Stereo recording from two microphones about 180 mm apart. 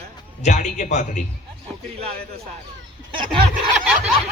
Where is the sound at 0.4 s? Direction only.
40° left (ahead or behind).